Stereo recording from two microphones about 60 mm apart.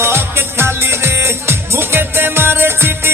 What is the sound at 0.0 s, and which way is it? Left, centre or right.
Music, right.